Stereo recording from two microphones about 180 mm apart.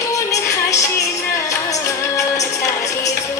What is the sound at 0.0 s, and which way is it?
Music, 20° left (ahead or behind).